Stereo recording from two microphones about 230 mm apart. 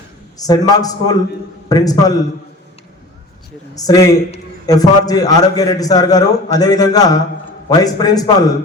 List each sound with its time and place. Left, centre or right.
0.3 s a man's voice: centre
3.8 s a man's voice: centre